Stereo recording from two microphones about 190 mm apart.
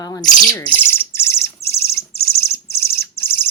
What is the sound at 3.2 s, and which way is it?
Bird, 10° left (ahead or behind).